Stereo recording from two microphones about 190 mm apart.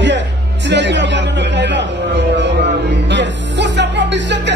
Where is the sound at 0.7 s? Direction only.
70° right (ahead or behind).